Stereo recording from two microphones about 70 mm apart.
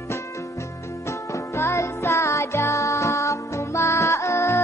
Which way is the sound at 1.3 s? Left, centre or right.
Left.